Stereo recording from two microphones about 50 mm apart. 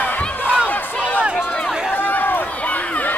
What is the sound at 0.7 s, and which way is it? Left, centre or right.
Battle cry, left.